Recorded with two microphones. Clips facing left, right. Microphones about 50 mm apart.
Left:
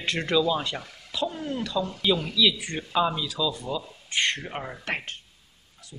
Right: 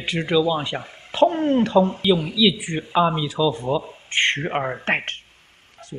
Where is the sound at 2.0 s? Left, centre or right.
Centre; by 5.2 s right.